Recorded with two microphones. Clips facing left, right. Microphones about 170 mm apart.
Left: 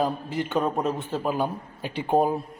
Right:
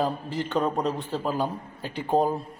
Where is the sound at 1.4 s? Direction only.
15° left (ahead or behind).